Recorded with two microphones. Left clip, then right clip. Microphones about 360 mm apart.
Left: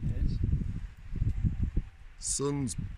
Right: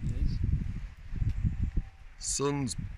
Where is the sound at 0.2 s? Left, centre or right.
Left.